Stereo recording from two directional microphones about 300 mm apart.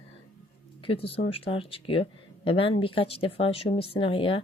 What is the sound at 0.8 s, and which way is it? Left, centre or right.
Speech, centre.